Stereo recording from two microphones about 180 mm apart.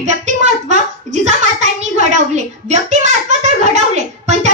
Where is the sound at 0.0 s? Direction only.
40° right (ahead or behind).